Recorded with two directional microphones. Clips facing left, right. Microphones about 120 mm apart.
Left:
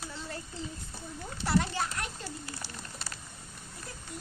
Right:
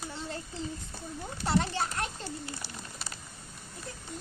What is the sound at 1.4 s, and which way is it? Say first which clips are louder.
Speech: even; 25° right (ahead or behind).